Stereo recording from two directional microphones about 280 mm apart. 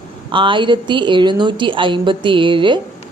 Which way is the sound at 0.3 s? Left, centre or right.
Centre.